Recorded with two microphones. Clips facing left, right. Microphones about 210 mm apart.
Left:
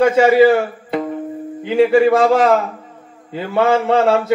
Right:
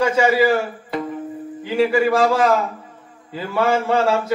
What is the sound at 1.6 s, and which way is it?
A man's voice, 25° left (ahead or behind).